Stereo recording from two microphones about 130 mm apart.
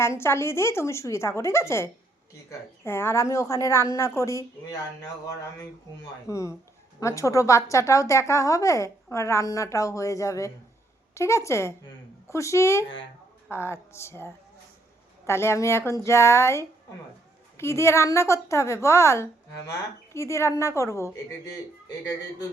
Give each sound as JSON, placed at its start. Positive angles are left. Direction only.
{"t": 0.2, "sound": "a woman's voice", "side_deg": 20}
{"t": 6.2, "sound": "a woman's voice", "side_deg": 25}